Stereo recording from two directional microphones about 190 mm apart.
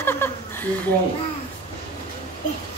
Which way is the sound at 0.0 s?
10° left (ahead or behind).